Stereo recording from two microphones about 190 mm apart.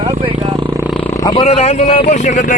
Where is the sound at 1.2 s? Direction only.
30° left (ahead or behind).